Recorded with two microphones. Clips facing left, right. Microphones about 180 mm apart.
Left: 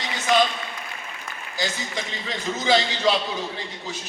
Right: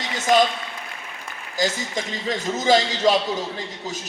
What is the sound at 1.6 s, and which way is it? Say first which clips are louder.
A man's voice: right 5 dB; 45° right (ahead or behind).